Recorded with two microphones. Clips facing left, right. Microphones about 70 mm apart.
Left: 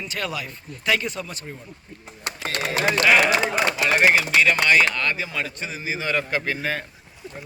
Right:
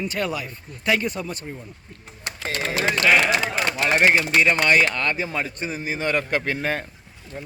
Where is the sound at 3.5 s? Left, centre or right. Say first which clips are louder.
Left 2 dB; centre.